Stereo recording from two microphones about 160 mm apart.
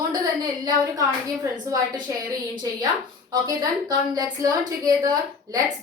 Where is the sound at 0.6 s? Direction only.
20° right (ahead or behind).